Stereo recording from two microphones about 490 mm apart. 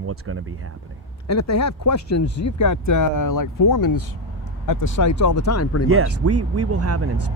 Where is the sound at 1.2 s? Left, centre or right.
Left.